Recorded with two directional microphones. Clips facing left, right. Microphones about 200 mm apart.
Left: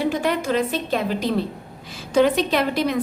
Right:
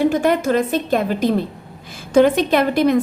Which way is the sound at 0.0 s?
50° right (ahead or behind).